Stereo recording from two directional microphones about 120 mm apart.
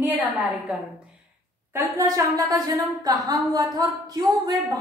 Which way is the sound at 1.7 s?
30° right (ahead or behind).